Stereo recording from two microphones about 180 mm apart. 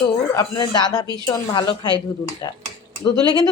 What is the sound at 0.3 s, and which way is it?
A woman's voice, 25° left (ahead or behind).